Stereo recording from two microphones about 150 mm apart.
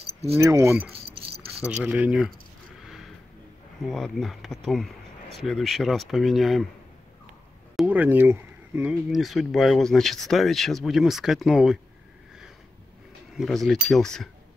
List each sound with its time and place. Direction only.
0.0 s keys jangling: 40° right (ahead or behind)
0.4 s speech: 20° right (ahead or behind)
1.6 s speech: 10° right (ahead or behind)
2.8 s a sound: centre (ahead or behind)
3.8 s speech: centre (ahead or behind)
7.7 s speech: 10° right (ahead or behind)
9.1 s speech: centre (ahead or behind)
13.4 s speech: centre (ahead or behind)